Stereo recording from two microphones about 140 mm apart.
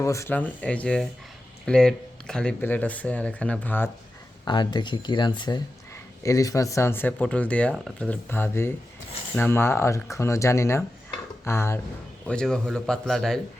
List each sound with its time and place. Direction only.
0.0 s speech: 20° left (ahead or behind)
0.3 s speech: 10° left (ahead or behind)
4.4 s speech: 30° left (ahead or behind)
12.2 s speech: 5° left (ahead or behind)